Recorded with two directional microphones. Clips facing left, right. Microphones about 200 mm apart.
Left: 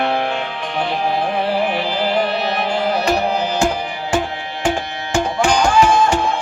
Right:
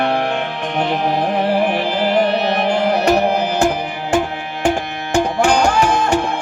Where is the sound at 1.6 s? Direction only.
55° right (ahead or behind).